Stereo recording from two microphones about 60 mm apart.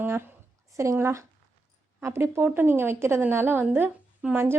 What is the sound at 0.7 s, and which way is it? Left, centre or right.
Speech, right.